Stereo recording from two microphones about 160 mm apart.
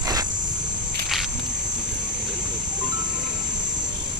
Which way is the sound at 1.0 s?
Centre (ahead or behind).